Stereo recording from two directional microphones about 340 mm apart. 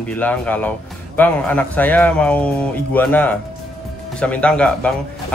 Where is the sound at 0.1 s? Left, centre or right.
Centre.